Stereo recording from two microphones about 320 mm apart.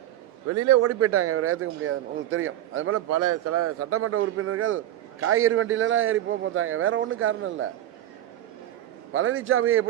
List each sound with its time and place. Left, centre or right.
0.4 s a man's voice: right
9.1 s a man's voice: right